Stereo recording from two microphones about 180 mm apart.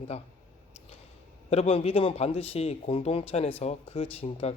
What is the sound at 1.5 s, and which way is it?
A man's voice, 35° left (ahead or behind).